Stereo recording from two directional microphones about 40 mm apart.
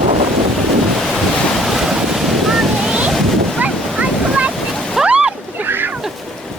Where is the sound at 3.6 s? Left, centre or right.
Right.